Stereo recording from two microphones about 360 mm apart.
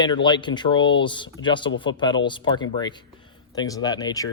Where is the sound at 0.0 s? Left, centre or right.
Centre.